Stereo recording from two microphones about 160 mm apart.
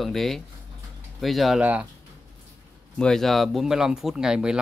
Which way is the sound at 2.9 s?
5° left (ahead or behind).